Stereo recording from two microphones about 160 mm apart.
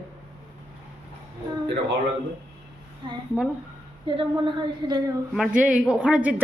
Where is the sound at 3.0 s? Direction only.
25° right (ahead or behind).